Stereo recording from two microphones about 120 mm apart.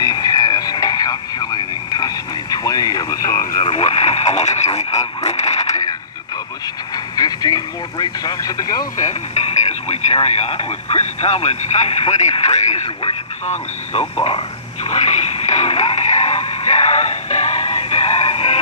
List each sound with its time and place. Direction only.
0.0 s radio: 35° left (ahead or behind)
3.6 s radio: 55° left (ahead or behind)
7.2 s speech: 35° left (ahead or behind)
9.3 s speech: 65° left (ahead or behind)
14.9 s radio: 65° left (ahead or behind)